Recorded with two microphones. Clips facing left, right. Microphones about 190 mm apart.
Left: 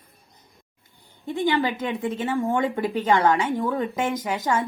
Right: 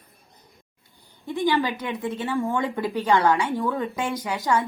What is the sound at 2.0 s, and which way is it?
A woman's voice, 20° left (ahead or behind).